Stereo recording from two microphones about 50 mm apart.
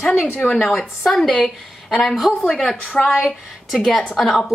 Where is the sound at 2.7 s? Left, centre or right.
Left.